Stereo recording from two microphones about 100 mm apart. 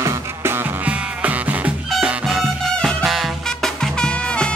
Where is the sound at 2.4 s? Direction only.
Centre (ahead or behind).